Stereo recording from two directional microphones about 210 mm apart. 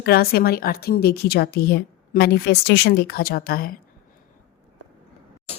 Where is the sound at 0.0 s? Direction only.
45° left (ahead or behind).